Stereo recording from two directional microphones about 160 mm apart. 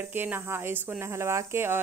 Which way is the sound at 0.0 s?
10° right (ahead or behind).